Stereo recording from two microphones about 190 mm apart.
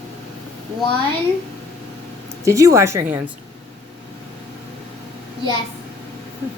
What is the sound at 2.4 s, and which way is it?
Speech, 15° right (ahead or behind).